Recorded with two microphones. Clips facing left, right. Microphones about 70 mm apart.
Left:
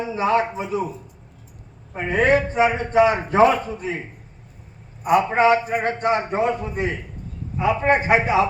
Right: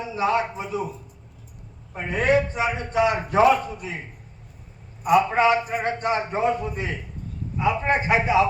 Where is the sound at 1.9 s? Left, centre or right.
Left.